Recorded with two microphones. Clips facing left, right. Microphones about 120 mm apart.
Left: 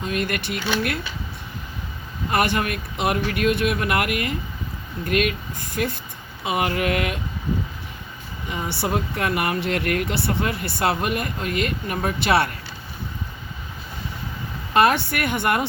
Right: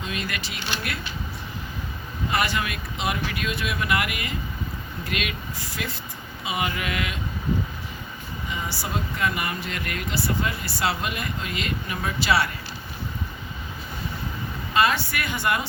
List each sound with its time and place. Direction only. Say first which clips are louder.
0.0 s speech: left 6 dB; 55° left (ahead or behind)
2.3 s speech: left 5 dB; 55° left (ahead or behind)
8.4 s speech: left 6 dB; 60° left (ahead or behind)
14.7 s speech: left 4 dB; 60° left (ahead or behind)